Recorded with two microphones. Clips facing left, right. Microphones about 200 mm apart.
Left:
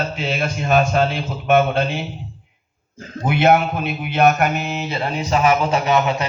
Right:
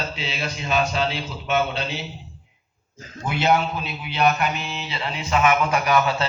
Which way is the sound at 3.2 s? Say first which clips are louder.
Left 5 dB; 55° left (ahead or behind).